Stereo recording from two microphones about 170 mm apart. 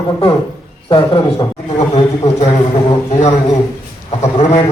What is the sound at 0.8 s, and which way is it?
Speech, 30° left (ahead or behind).